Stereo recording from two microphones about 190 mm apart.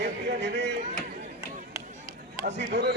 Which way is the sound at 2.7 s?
65° right (ahead or behind).